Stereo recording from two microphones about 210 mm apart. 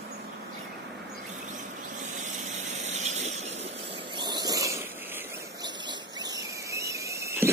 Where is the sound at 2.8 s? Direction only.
35° right (ahead or behind).